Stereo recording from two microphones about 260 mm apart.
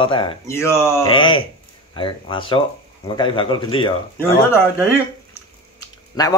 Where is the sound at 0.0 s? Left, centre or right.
Centre.